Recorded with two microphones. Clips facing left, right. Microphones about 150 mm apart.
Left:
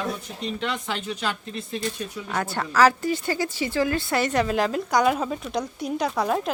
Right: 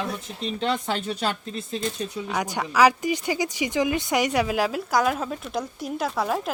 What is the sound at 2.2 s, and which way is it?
A woman's voice, 10° right (ahead or behind).